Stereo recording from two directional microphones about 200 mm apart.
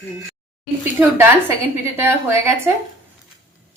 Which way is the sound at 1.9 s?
10° right (ahead or behind).